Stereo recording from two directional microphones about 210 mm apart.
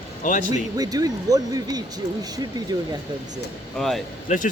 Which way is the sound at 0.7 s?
15° right (ahead or behind).